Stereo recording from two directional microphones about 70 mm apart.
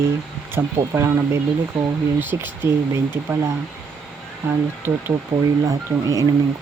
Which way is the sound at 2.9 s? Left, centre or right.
Right.